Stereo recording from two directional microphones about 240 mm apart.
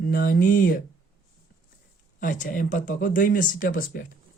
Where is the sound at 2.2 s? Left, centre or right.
Left.